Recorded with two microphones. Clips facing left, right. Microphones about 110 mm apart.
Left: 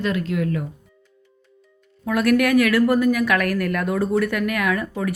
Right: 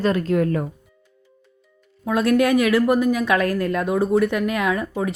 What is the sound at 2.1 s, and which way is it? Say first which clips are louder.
A woman's voice: even; 20° right (ahead or behind).